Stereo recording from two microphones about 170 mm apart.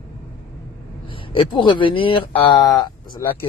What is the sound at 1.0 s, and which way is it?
Speech, 30° left (ahead or behind).